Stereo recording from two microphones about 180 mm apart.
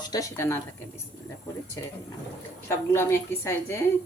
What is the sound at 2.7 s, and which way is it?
Speech, 15° left (ahead or behind).